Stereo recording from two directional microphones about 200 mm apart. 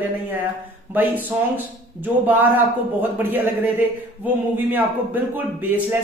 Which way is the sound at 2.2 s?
10° right (ahead or behind).